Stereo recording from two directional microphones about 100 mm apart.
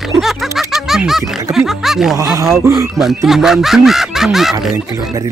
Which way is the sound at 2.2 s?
35° right (ahead or behind).